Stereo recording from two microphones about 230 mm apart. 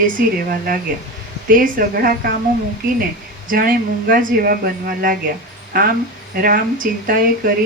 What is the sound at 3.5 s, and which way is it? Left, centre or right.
Speech, right.